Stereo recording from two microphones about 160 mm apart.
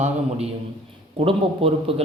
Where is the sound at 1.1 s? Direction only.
35° right (ahead or behind).